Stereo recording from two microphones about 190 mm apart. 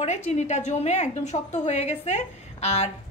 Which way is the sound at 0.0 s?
40° left (ahead or behind).